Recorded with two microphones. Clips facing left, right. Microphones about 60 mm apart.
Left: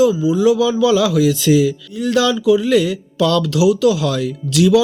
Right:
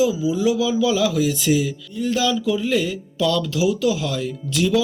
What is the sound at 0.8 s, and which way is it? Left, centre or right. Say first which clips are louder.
Speech: left 5 dB; left.